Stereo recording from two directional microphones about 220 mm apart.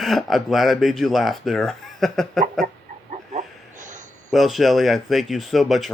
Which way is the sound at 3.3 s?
35° right (ahead or behind).